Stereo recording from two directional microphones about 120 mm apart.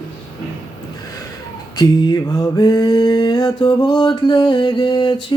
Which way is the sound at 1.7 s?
35° left (ahead or behind).